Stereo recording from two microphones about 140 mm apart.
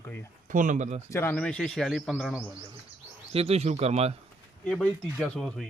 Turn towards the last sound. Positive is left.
turn(degrees=5)  # may be behind; listen again after turning